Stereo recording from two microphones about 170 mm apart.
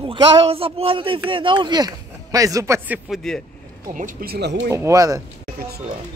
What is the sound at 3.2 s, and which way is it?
Speech, 5° left (ahead or behind).